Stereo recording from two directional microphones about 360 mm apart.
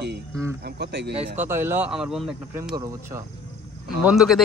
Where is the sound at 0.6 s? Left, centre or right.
Right.